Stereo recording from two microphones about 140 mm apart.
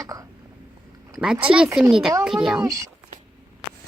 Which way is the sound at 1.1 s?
5° right (ahead or behind).